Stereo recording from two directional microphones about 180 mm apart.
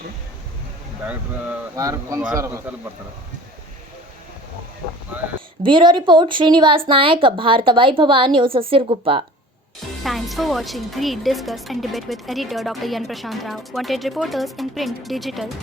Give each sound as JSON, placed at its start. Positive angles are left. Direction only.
{"t": 1.7, "sound": "speech", "side_deg": -20}
{"t": 5.6, "sound": "a woman's voice", "side_deg": -25}
{"t": 10.0, "sound": "a woman's voice", "side_deg": 0}